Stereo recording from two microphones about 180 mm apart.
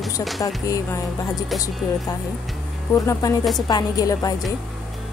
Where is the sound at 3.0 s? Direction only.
20° left (ahead or behind).